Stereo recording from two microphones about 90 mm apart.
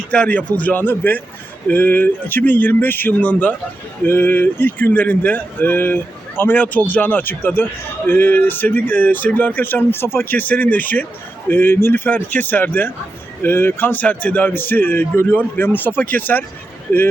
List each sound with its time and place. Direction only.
0.1 s a man's voice: 15° left (ahead or behind)